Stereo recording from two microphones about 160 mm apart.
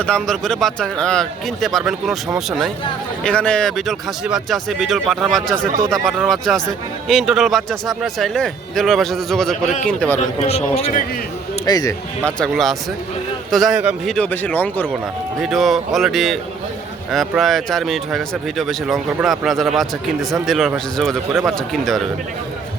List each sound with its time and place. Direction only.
0.0 s speech: 5° left (ahead or behind)
10.4 s a man's voice: 40° left (ahead or behind)
11.6 s speech: 25° left (ahead or behind)
12.2 s speech: 5° left (ahead or behind)
15.4 s speech: centre (ahead or behind)